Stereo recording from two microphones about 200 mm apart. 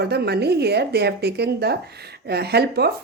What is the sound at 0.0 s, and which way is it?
A woman's voice, 55° right (ahead or behind).